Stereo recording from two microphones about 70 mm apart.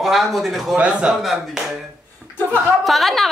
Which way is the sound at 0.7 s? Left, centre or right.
Centre.